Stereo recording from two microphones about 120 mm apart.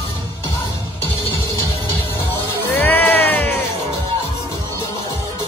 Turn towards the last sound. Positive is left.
turn(degrees=15)  # may be behind; listen again after turning